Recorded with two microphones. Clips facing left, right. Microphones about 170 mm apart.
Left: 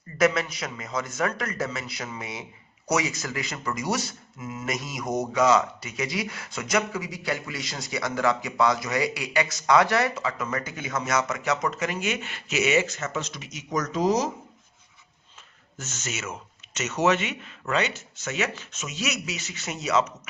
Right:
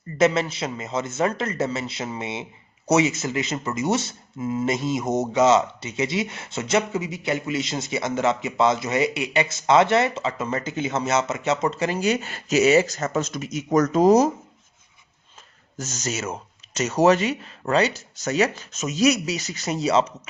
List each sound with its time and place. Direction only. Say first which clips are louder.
0.2 s a man's voice: right 3 dB; 25° right (ahead or behind); by 14.3 s 50° right (ahead or behind)
15.8 s speech: right 6 dB; 40° right (ahead or behind)